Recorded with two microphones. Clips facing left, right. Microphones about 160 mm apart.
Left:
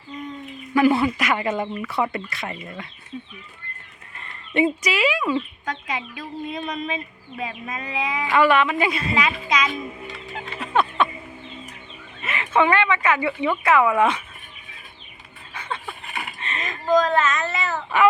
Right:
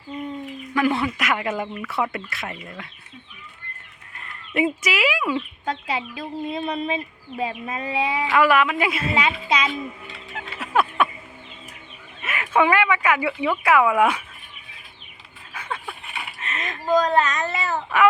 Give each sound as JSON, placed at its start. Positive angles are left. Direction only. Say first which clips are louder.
{"t": 0.7, "sound": "speech", "louder": "left 4 dB", "side_deg": 5}
{"t": 4.2, "sound": "speech", "louder": "left 2 dB", "side_deg": -5}
{"t": 5.6, "sound": "speech", "louder": "right 3 dB", "side_deg": -30}
{"t": 8.3, "sound": "speech", "louder": "left 1 dB", "side_deg": -5}
{"t": 9.5, "sound": "speech", "louder": "even", "side_deg": -30}
{"t": 10.3, "sound": "a sound", "louder": "even", "side_deg": -5}
{"t": 12.2, "sound": "a woman's voice", "louder": "even", "side_deg": -5}
{"t": 15.5, "sound": "dog", "louder": "even", "side_deg": -10}
{"t": 16.4, "sound": "a sound", "louder": "even", "side_deg": 0}
{"t": 17.1, "sound": "speech", "louder": "right 1 dB", "side_deg": -35}
{"t": 17.9, "sound": "speech", "louder": "even", "side_deg": 0}